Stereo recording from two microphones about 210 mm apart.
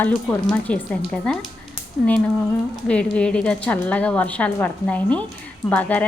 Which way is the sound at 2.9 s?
5° left (ahead or behind).